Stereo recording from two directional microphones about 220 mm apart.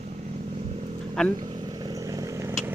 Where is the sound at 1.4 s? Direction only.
20° right (ahead or behind).